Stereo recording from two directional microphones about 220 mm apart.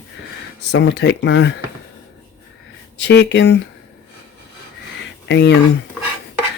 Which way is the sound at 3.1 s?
50° left (ahead or behind).